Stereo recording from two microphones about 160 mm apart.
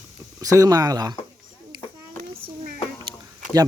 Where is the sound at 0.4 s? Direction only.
20° right (ahead or behind).